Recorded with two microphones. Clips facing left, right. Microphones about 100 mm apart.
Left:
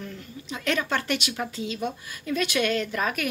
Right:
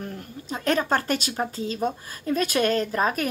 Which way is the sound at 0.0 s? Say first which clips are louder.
Right 3 dB; 45° right (ahead or behind).